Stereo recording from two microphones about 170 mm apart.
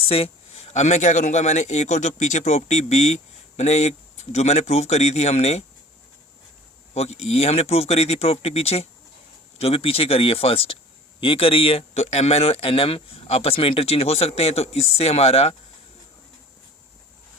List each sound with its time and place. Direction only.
0.0 s speech: 35° left (ahead or behind)
6.9 s speech: 40° left (ahead or behind)